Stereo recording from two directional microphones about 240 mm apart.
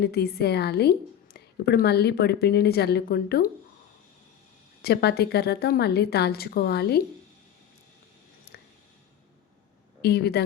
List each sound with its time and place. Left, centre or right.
0.0 s a woman's voice: left
4.8 s a woman's voice: left
8.5 s a sound: left
10.0 s a woman's voice: left